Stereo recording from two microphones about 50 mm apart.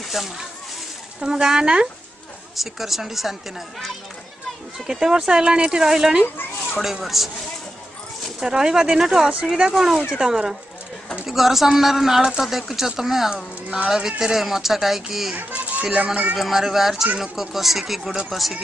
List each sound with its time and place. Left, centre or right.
0.0 s speech: centre
1.2 s a woman's voice: centre
4.7 s a woman's voice: centre
6.2 s speech: left
6.8 s speech: centre
8.4 s a woman's voice: centre
15.3 s a child's voice: right
16.3 s a woman's voice: centre